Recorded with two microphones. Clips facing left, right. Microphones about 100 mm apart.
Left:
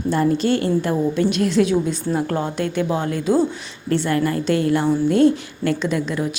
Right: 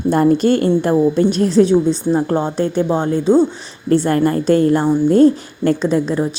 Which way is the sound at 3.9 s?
40° right (ahead or behind).